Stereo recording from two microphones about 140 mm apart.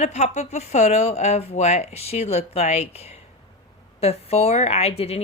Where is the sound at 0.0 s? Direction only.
55° left (ahead or behind).